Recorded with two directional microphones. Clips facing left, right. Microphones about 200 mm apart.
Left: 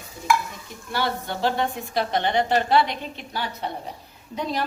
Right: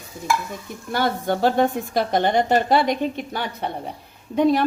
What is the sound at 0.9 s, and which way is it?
A woman's voice, 45° right (ahead or behind).